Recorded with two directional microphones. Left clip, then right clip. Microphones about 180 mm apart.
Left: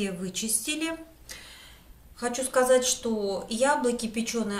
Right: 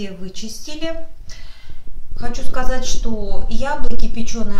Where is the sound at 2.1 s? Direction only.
35° left (ahead or behind).